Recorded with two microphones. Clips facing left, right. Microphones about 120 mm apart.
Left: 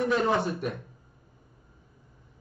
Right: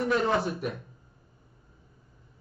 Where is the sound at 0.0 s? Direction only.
Centre (ahead or behind).